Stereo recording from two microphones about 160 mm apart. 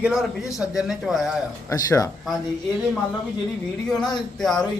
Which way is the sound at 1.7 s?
20° left (ahead or behind).